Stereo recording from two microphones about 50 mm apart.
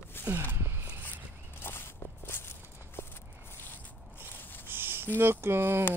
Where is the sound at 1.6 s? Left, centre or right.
Left.